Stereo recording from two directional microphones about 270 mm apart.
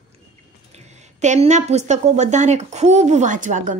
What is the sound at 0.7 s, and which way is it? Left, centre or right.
A woman's voice, right.